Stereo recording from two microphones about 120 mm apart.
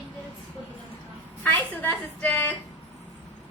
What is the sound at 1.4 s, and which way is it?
A woman's voice, 15° left (ahead or behind).